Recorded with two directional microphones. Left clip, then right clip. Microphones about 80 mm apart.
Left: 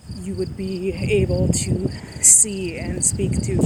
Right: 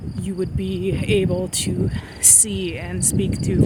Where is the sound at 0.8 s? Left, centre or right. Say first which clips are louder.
Even; right.